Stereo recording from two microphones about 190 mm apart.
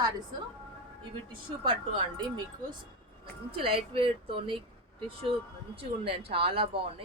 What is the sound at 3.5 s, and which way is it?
Speech, 30° right (ahead or behind).